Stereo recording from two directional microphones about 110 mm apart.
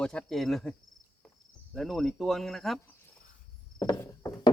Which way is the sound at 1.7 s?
Centre (ahead or behind).